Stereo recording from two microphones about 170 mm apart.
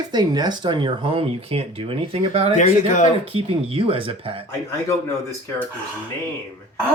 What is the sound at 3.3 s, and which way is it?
Speech, 35° right (ahead or behind).